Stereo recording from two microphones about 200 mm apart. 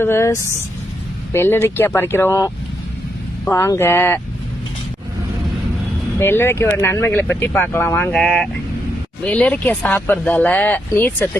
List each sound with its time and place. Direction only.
0.0 s speech: 15° left (ahead or behind)
6.1 s speech: 10° left (ahead or behind)